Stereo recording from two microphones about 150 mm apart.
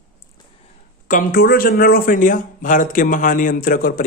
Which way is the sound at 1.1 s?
70° left (ahead or behind).